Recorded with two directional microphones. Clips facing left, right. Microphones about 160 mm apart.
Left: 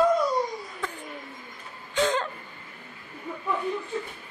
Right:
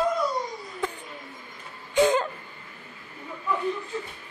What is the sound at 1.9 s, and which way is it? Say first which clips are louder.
Gasp: right 4 dB; 10° right (ahead or behind).